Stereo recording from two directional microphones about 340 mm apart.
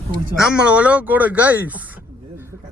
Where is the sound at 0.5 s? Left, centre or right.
Centre.